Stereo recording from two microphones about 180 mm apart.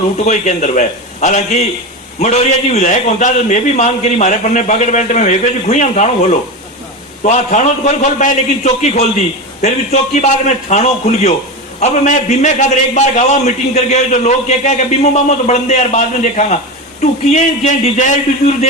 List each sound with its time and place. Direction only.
0.3 s a man's voice: 40° left (ahead or behind)